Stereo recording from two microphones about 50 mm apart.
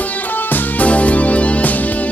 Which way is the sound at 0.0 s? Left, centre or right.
Left.